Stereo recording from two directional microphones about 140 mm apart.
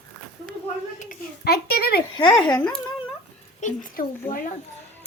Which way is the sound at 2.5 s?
10° left (ahead or behind).